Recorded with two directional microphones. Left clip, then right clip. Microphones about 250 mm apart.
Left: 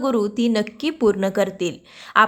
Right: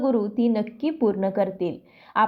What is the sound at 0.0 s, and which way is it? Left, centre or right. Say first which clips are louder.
A woman's voice: left 2 dB; centre.